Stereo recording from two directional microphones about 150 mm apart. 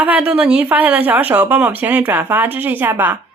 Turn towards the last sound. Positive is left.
turn(degrees=-15)  # may be behind; listen again after turning